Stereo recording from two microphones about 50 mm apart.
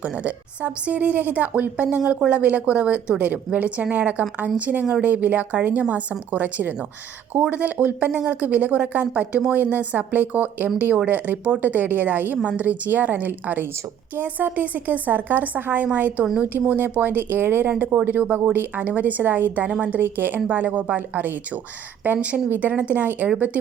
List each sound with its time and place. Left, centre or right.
0.0 s speech: right